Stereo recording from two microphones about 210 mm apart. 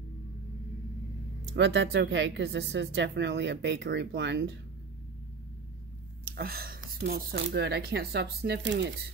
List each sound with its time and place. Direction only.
1.5 s speech: 60° right (ahead or behind)
6.3 s speech: 45° right (ahead or behind)